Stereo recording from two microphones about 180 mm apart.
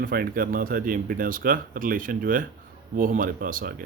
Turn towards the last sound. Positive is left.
turn(degrees=-50)  # may be behind; listen again after turning